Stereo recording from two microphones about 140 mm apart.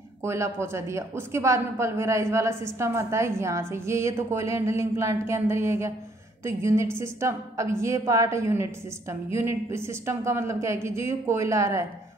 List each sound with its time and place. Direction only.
0.2 s a woman's voice: 20° right (ahead or behind)